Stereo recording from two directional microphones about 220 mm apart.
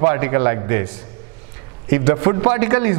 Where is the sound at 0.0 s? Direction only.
15° right (ahead or behind).